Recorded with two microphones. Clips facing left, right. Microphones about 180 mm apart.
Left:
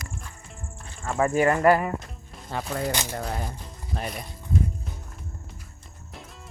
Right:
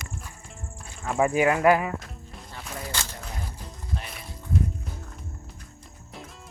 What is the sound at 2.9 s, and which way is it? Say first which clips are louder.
Speech: left 5 dB; 15° left (ahead or behind).